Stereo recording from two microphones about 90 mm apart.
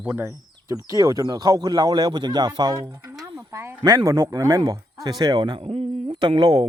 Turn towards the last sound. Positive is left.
turn(degrees=-55)  # may be behind; listen again after turning